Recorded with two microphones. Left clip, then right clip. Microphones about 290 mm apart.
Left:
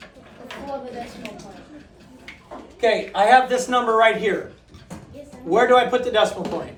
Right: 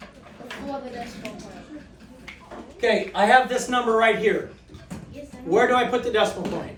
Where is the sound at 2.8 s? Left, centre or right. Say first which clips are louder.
Left 2 dB; centre.